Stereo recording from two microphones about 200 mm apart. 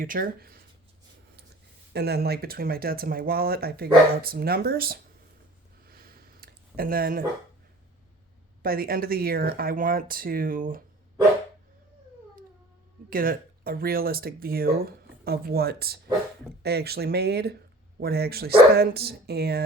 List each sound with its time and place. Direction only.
0.0 s speech: 45° right (ahead or behind)
1.9 s speech: 55° right (ahead or behind)
5.9 s a sound: 50° right (ahead or behind)
8.6 s speech: 50° right (ahead or behind)
13.1 s speech: 45° right (ahead or behind)